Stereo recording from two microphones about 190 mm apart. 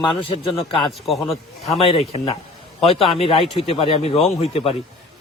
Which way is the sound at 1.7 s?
30° left (ahead or behind).